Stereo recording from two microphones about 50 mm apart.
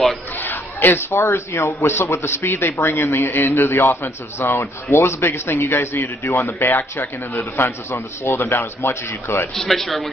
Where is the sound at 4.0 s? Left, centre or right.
Left.